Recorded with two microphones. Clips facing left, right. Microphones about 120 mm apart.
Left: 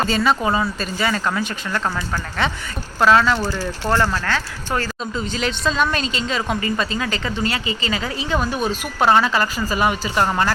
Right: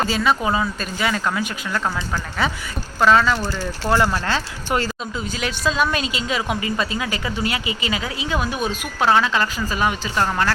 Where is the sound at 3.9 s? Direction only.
10° right (ahead or behind).